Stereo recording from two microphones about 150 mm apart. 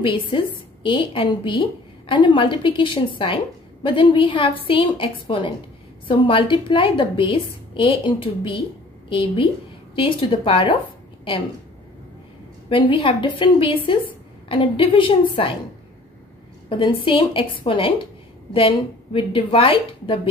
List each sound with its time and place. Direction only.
0.0 s a woman's voice: 35° left (ahead or behind)
12.6 s a woman's voice: 35° left (ahead or behind)
16.6 s a woman's voice: 35° left (ahead or behind)